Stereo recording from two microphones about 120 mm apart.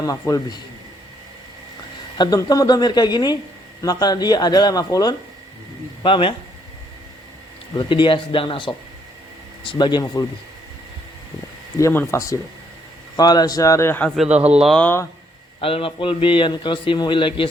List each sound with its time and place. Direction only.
0.0 s a man's voice: 30° left (ahead or behind)
2.1 s speech: 35° left (ahead or behind)
6.0 s a man's voice: 45° left (ahead or behind)
7.8 s a man's voice: 45° left (ahead or behind)
11.8 s a man's voice: 25° left (ahead or behind)
15.6 s a man's voice: 50° left (ahead or behind)